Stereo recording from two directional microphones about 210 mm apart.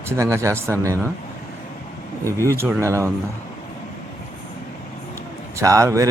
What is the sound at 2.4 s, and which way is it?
Speech, 10° right (ahead or behind).